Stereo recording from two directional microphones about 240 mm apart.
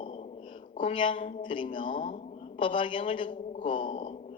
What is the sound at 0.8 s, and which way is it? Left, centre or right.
A man's voice, left.